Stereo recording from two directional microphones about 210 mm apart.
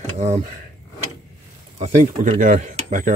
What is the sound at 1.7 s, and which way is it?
Speech, 35° right (ahead or behind).